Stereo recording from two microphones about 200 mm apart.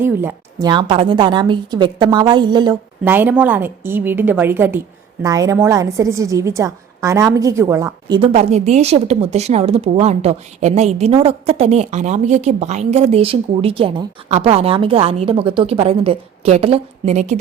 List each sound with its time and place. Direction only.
0.0 s a woman's voice: 10° right (ahead or behind)
0.7 s a woman's voice: 25° right (ahead or behind)
3.0 s a woman's voice: 10° right (ahead or behind)
8.2 s a woman's voice: 30° right (ahead or behind)